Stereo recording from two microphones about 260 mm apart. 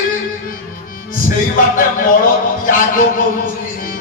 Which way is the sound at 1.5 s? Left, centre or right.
Left.